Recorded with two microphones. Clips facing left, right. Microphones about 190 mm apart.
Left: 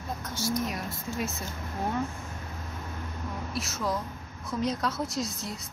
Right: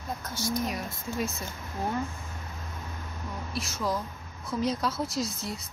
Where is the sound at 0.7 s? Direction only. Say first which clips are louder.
Right 1 dB; centre (ahead or behind).